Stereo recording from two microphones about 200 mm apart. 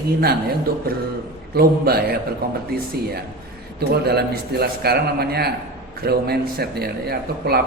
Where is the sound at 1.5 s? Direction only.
50° right (ahead or behind).